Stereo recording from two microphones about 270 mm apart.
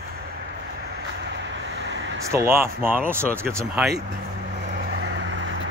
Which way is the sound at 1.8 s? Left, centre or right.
Right.